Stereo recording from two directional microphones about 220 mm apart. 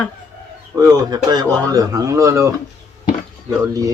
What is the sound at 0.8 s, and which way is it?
Speech, 20° right (ahead or behind).